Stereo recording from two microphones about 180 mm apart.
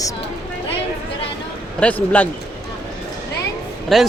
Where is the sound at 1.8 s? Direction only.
10° left (ahead or behind).